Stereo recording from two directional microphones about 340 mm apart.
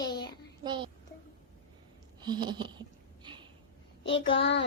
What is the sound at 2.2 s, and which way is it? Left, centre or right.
Speech, centre.